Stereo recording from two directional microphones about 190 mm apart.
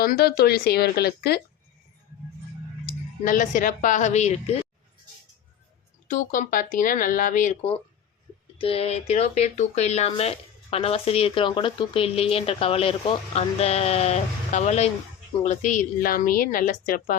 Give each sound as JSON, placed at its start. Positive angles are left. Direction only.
{"t": 0.0, "sound": "speech", "side_deg": 55}
{"t": 3.2, "sound": "a woman's voice", "side_deg": 45}
{"t": 6.1, "sound": "a woman's voice", "side_deg": 45}
{"t": 8.5, "sound": "a woman's voice", "side_deg": 30}